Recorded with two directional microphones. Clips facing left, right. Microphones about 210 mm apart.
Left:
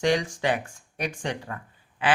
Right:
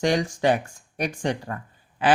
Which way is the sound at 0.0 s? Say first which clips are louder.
Right 2 dB; 40° right (ahead or behind).